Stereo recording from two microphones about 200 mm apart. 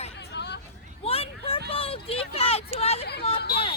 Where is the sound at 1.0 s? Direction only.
30° left (ahead or behind).